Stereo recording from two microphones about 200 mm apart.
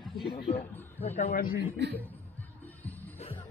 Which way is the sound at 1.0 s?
35° left (ahead or behind).